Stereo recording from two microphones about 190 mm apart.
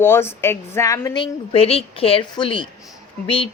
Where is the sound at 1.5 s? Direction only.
30° left (ahead or behind).